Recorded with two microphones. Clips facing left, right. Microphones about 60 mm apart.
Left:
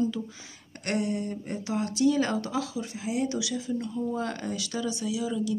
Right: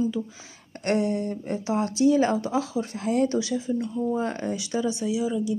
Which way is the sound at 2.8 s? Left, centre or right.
Right.